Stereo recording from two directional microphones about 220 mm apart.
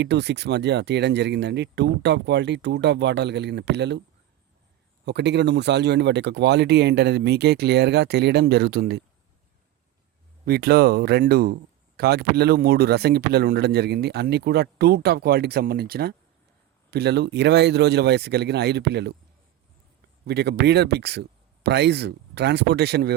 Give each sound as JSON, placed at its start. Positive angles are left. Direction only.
{"t": 0.0, "sound": "speech", "side_deg": -50}
{"t": 5.0, "sound": "speech", "side_deg": -50}
{"t": 10.4, "sound": "speech", "side_deg": -45}
{"t": 20.2, "sound": "speech", "side_deg": -50}